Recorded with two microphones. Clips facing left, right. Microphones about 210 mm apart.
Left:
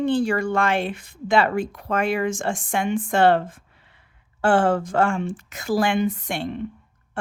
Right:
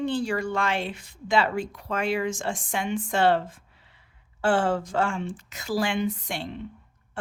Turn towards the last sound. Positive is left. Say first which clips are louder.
# left 5 dB
turn(degrees=55)  # may be behind; listen again after turning